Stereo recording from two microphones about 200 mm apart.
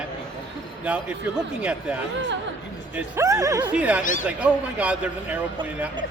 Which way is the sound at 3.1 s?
15° right (ahead or behind).